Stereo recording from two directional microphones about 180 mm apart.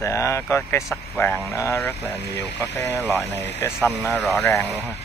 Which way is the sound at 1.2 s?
15° left (ahead or behind).